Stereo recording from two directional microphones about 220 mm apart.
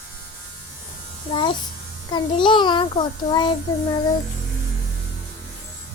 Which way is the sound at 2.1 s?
20° left (ahead or behind).